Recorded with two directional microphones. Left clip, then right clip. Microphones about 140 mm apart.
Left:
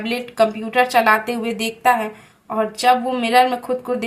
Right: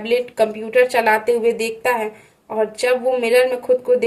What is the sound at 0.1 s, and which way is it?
A woman's voice, 25° right (ahead or behind).